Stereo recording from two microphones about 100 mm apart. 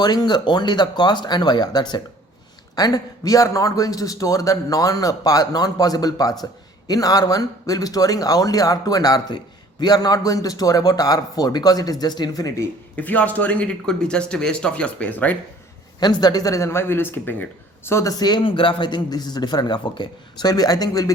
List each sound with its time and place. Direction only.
0.0 s a man's voice: 45° left (ahead or behind)
13.0 s speech: 15° left (ahead or behind)
16.0 s a man's voice: 45° left (ahead or behind)
18.2 s speech: 50° left (ahead or behind)